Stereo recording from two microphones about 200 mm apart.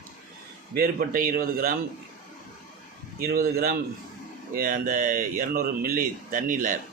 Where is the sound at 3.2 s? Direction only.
50° right (ahead or behind).